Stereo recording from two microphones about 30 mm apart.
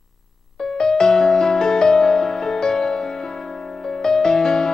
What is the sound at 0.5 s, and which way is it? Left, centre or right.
Music, centre.